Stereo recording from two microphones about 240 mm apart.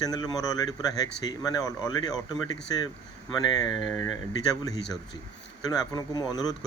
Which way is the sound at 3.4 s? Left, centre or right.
Centre.